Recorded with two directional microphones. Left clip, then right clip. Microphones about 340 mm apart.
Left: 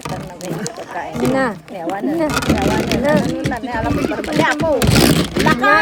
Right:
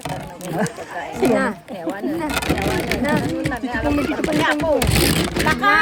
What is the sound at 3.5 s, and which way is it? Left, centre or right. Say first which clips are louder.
Speech: left 1 dB; left.